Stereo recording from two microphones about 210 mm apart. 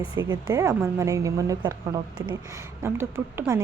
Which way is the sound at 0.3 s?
15° right (ahead or behind).